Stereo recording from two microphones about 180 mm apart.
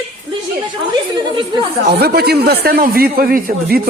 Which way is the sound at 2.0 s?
60° right (ahead or behind).